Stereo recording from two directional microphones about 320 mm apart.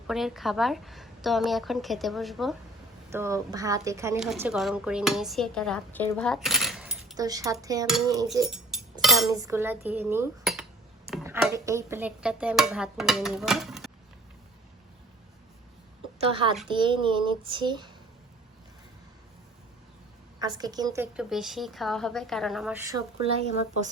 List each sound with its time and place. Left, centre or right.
0.1 s a child's voice: centre
9.9 s cutlery: centre
11.1 s speech: centre
16.1 s a woman's voice: centre
20.4 s speech: centre